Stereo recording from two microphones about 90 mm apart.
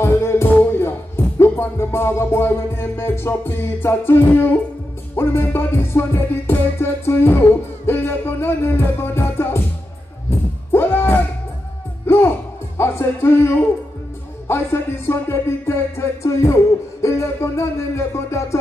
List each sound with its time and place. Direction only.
0.0 s music: 30° left (ahead or behind)
10.7 s music: 25° left (ahead or behind)
12.7 s speech: 25° left (ahead or behind)
14.5 s music: 25° left (ahead or behind)